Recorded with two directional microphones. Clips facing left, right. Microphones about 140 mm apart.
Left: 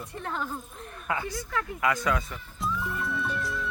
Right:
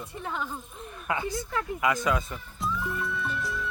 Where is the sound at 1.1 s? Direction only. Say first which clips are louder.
Right 1 dB; 20° right (ahead or behind).